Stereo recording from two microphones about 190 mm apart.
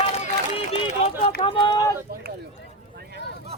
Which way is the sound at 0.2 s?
30° left (ahead or behind).